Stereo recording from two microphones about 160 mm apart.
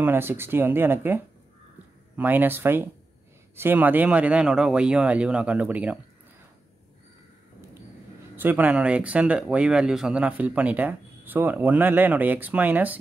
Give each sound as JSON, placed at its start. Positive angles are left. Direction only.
{"t": 0.0, "sound": "speech", "side_deg": -15}
{"t": 8.4, "sound": "speech", "side_deg": -10}